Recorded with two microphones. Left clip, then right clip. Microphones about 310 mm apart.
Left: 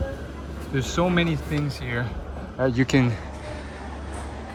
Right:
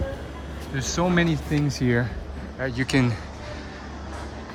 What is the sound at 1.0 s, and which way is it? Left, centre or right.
Speech, centre.